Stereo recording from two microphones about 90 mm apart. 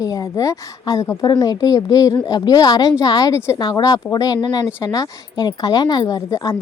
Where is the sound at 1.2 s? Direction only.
50° left (ahead or behind).